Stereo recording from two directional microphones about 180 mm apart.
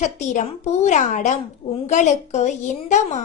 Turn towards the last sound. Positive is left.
turn(degrees=40)  # may be behind; listen again after turning